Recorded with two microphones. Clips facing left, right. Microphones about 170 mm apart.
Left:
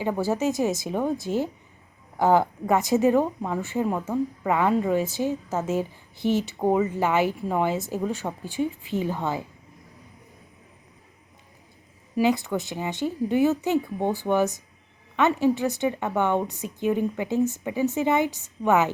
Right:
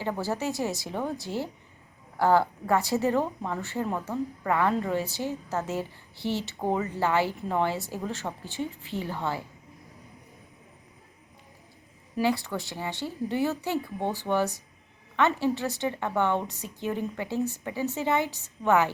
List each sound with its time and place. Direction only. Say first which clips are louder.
0.0 s a woman's voice: left 5 dB; 15° left (ahead or behind)
12.1 s a woman's voice: left 4 dB; 20° left (ahead or behind)